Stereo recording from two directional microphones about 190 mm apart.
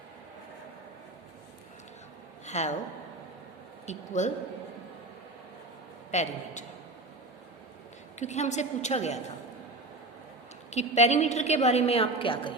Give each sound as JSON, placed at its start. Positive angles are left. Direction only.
{"t": 2.5, "sound": "a woman's voice", "side_deg": 40}
{"t": 3.8, "sound": "a woman's voice", "side_deg": 40}
{"t": 6.1, "sound": "a man's voice", "side_deg": 40}
{"t": 8.2, "sound": "a woman's voice", "side_deg": 35}
{"t": 10.7, "sound": "a woman's voice", "side_deg": 35}